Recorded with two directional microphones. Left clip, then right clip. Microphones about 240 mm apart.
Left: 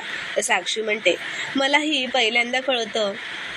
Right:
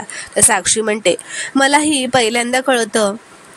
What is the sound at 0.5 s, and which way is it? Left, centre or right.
Speech, right.